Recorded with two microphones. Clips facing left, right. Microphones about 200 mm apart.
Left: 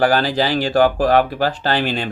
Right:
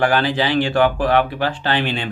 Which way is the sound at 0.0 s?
40° left (ahead or behind).